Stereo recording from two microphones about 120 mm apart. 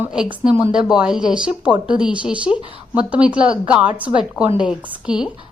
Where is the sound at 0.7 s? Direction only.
5° right (ahead or behind).